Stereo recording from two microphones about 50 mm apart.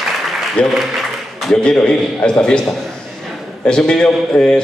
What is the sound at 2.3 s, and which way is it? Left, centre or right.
Speech, centre.